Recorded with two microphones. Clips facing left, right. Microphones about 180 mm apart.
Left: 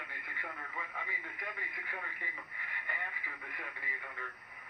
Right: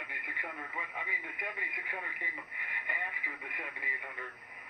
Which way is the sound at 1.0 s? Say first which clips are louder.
Right 3 dB; 15° right (ahead or behind).